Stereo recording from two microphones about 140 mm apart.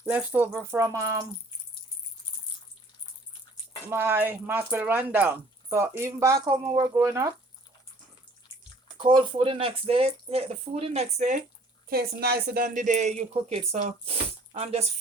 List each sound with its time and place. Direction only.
0.1 s speech: 15° right (ahead or behind)
3.8 s speech: 15° right (ahead or behind)
9.0 s speech: 35° right (ahead or behind); by 11.4 s 60° right (ahead or behind)
11.9 s a woman's voice: 90° right; by 14.8 s 45° right (ahead or behind)